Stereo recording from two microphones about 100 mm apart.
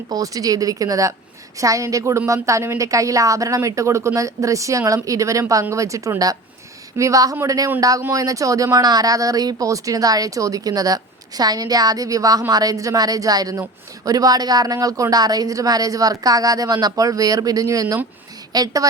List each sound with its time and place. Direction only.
0.1 s speech: 35° right (ahead or behind)